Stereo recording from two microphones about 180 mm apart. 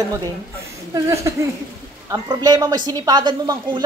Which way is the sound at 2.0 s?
20° right (ahead or behind).